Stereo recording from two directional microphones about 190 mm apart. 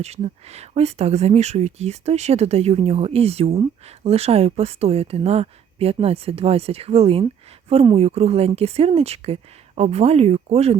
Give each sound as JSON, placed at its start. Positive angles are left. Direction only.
{"t": 0.0, "sound": "speech", "side_deg": -35}